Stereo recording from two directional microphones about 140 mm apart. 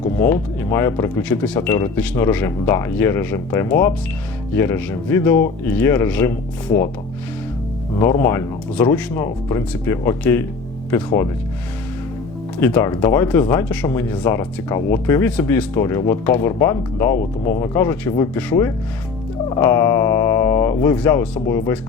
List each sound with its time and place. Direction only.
0.2 s speech: 15° left (ahead or behind)
1.2 s speech: 10° left (ahead or behind)
7.9 s speech: 20° left (ahead or behind)
12.5 s speech: 15° left (ahead or behind)
19.5 s speech: 20° left (ahead or behind)